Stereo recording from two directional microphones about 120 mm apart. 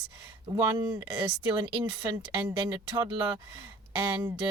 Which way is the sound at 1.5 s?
40° right (ahead or behind).